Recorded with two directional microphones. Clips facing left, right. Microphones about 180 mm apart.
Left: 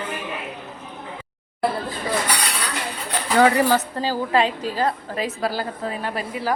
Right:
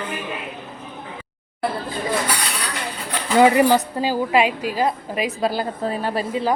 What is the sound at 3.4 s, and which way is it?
A woman's voice, 15° right (ahead or behind).